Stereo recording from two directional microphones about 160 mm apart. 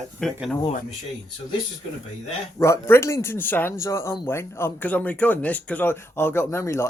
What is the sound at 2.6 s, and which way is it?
Speech, 15° left (ahead or behind).